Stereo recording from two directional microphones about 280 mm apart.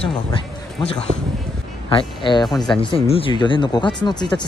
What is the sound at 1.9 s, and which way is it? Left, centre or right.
Speech, centre.